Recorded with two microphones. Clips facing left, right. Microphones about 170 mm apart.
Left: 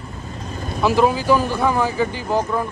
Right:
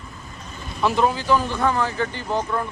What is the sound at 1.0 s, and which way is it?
Speech, 10° left (ahead or behind).